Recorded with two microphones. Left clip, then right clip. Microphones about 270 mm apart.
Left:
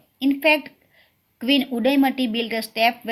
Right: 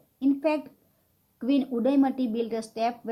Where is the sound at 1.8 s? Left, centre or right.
Left.